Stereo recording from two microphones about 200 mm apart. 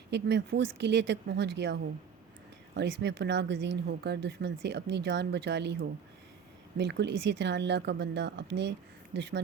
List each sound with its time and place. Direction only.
0.1 s speech: 60° right (ahead or behind)